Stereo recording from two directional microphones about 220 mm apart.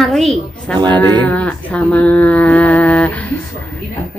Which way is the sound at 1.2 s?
5° left (ahead or behind).